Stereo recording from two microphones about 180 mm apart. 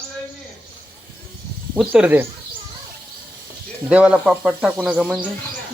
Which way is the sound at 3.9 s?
5° right (ahead or behind).